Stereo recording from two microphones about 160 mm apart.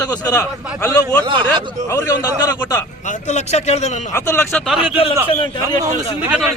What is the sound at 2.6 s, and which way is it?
Speech, 15° left (ahead or behind).